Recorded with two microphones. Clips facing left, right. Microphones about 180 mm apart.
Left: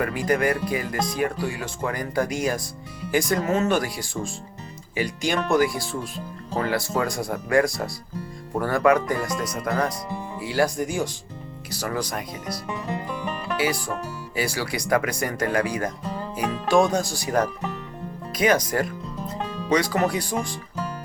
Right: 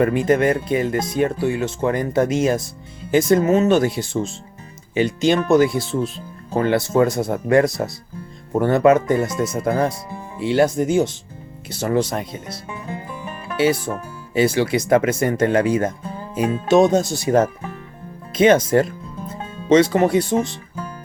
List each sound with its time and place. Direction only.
0.0 s speech: 25° right (ahead or behind)